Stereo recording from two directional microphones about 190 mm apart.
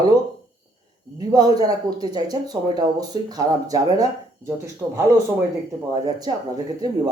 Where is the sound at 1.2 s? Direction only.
20° right (ahead or behind).